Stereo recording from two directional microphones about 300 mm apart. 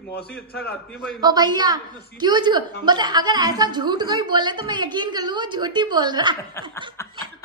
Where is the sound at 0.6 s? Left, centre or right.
Centre.